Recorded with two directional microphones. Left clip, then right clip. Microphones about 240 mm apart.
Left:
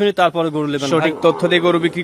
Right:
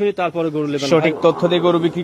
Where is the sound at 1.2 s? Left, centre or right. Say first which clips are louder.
Left 1 dB; centre.